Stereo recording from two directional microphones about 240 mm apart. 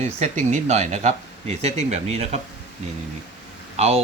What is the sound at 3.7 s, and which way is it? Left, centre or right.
Speech, right.